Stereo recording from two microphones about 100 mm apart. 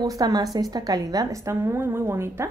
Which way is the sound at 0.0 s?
40° right (ahead or behind).